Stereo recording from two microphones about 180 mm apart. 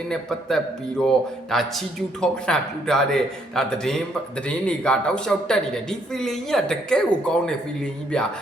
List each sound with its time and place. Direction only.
0.1 s speech: 5° left (ahead or behind)